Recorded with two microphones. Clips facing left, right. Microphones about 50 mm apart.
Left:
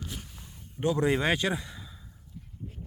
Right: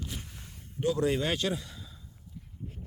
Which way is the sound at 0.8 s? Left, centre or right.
Left.